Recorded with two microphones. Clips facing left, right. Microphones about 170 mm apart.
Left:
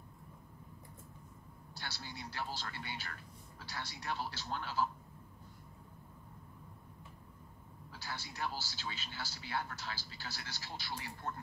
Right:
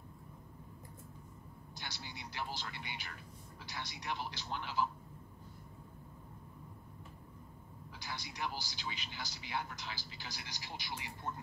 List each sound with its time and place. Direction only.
1.8 s speech: 15° right (ahead or behind)
8.0 s speech: 15° right (ahead or behind)